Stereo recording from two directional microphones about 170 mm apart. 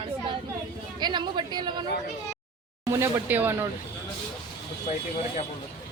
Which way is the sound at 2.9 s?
15° right (ahead or behind).